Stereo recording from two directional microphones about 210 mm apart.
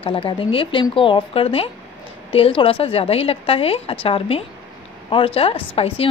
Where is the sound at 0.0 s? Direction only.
25° left (ahead or behind).